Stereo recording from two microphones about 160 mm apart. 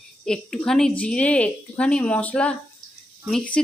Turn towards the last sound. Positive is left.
turn(degrees=5)  # may be behind; listen again after turning